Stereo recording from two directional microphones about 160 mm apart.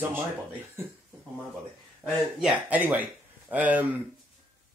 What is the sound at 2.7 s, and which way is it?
Speech, 10° right (ahead or behind).